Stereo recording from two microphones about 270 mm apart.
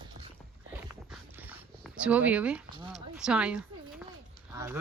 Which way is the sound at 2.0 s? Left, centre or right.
Centre.